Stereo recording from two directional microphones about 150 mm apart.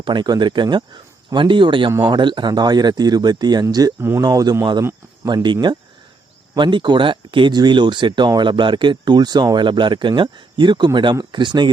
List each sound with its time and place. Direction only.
0.0 s speech: 30° right (ahead or behind)